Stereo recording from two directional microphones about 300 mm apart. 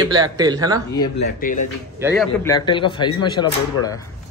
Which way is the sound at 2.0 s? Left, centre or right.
Centre.